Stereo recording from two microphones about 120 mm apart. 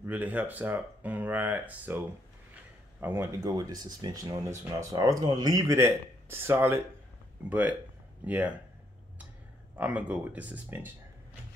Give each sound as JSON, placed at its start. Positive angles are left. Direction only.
{"t": 0.0, "sound": "speech", "side_deg": -15}
{"t": 3.0, "sound": "speech", "side_deg": -20}
{"t": 3.4, "sound": "speech", "side_deg": -30}
{"t": 5.8, "sound": "speech", "side_deg": -20}
{"t": 9.8, "sound": "speech", "side_deg": -10}